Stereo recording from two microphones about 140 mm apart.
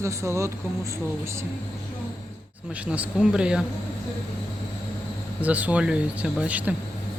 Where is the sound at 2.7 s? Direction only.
10° right (ahead or behind).